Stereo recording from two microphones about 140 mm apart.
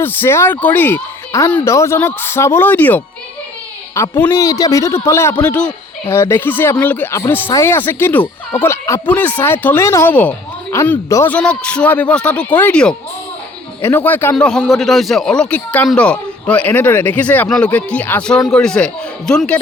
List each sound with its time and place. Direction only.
0.0 s a man's voice: 15° left (ahead or behind)